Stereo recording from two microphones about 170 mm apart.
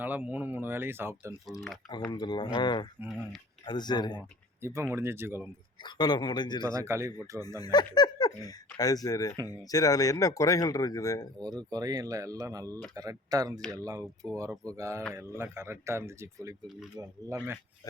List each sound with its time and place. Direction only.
0.0 s speech: 10° right (ahead or behind)
2.0 s speech: 25° left (ahead or behind)
3.0 s speech: 5° right (ahead or behind)
3.7 s speech: 25° left (ahead or behind)
4.6 s speech: 15° right (ahead or behind)
5.8 s speech: 25° left (ahead or behind)
6.6 s speech: 20° right (ahead or behind)
7.6 s speech: 25° left (ahead or behind)
11.4 s speech: 25° right (ahead or behind)
14.5 s speech: 5° left (ahead or behind)
14.8 s speech: 15° right (ahead or behind)